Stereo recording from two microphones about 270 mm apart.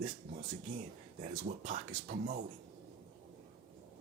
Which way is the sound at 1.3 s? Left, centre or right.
Right.